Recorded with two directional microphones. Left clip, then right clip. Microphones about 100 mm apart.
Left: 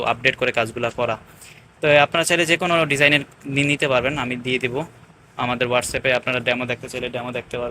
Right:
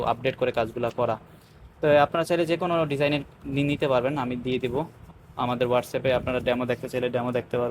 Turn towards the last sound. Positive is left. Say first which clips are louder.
# even
turn(degrees=-80)